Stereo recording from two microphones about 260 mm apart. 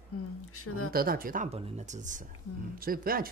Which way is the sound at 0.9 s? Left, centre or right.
Right.